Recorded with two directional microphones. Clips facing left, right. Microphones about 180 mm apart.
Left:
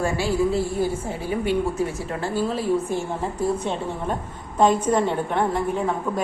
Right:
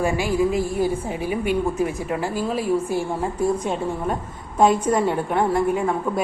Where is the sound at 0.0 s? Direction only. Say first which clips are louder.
Right 1 dB; 15° right (ahead or behind).